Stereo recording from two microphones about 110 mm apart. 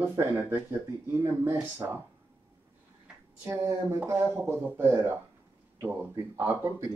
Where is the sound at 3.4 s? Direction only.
25° right (ahead or behind).